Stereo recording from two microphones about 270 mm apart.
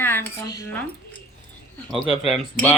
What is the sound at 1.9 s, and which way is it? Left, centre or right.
Speech, centre.